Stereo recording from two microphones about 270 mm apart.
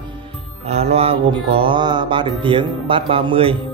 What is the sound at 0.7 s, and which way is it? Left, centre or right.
Mantra, right.